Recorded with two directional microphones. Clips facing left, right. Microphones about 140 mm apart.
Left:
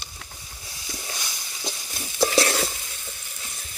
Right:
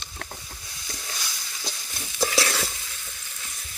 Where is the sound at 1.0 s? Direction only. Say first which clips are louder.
Left 2 dB; 20° left (ahead or behind).